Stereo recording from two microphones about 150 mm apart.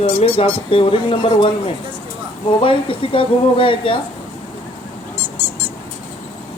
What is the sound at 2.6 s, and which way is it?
Speech, 35° left (ahead or behind).